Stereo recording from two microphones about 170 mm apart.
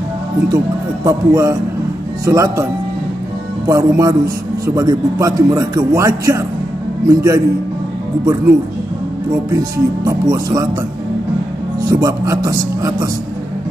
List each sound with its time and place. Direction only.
1.0 s a man's voice: 20° right (ahead or behind)
3.6 s speech: 20° right (ahead or behind)
9.5 s speech: 20° right (ahead or behind)
11.9 s speech: 20° right (ahead or behind)